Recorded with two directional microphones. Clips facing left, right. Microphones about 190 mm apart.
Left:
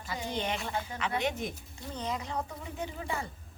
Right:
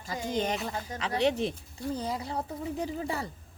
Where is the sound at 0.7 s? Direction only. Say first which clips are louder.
Even; 35° right (ahead or behind).